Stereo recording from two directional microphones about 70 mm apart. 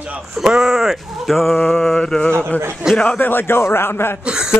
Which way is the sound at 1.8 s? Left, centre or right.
Centre.